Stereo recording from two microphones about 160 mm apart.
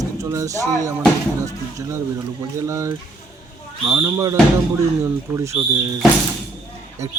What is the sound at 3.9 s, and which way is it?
Speech, 20° right (ahead or behind).